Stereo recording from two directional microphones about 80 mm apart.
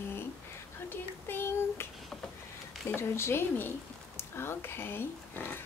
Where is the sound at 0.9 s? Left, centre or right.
Left.